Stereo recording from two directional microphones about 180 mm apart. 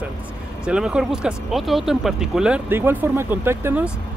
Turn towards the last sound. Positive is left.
turn(degrees=-10)  # may be behind; listen again after turning